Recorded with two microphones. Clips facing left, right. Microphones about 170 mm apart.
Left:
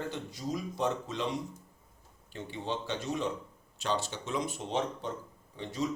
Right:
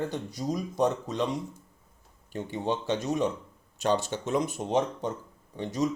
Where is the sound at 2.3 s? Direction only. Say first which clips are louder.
Right 6 dB; 45° right (ahead or behind).